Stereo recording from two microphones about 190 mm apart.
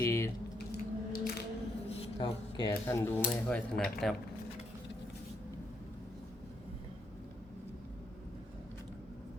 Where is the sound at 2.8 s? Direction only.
15° left (ahead or behind).